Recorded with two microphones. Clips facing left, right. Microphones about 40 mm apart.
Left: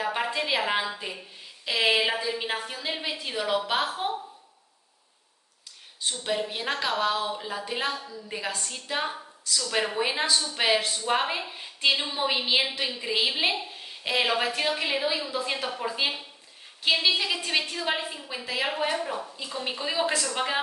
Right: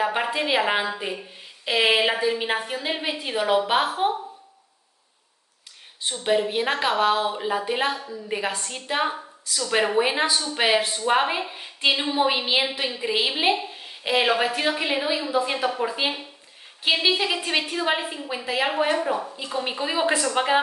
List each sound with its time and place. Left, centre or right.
0.0 s a woman's voice: centre
5.9 s a woman's voice: right